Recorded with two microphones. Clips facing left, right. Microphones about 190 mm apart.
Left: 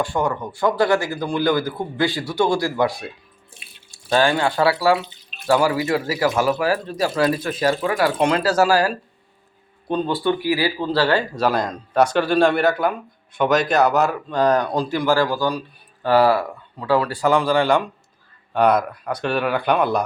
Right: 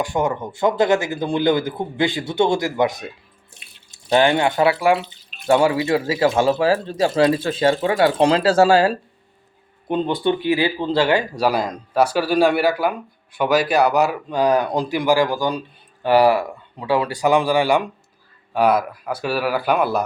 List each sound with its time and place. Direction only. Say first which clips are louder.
0.0 s speech: right 1 dB; 20° right (ahead or behind)